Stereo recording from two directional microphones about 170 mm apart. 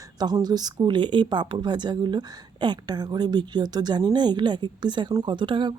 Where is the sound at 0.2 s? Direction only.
25° right (ahead or behind).